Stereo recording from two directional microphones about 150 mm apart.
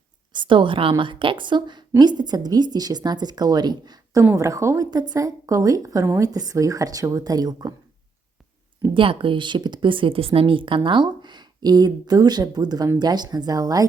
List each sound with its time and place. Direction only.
0.3 s speech: 30° right (ahead or behind)
8.8 s speech: 35° right (ahead or behind)